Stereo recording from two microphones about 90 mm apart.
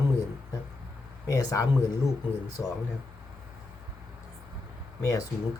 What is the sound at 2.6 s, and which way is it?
Speech, 25° right (ahead or behind).